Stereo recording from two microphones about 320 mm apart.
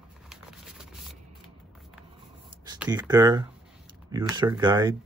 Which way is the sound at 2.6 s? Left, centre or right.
Centre.